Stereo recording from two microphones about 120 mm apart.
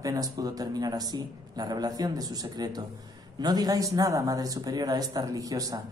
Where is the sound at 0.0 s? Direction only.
30° right (ahead or behind).